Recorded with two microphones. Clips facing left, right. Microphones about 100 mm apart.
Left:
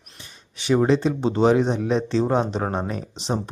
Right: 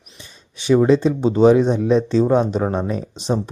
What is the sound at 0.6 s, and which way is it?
Speech, 25° left (ahead or behind).